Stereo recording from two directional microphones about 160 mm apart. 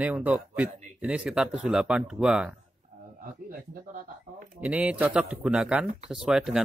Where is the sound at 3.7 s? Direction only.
50° right (ahead or behind).